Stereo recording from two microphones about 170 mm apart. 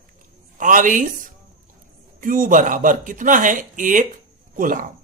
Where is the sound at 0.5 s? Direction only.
50° right (ahead or behind).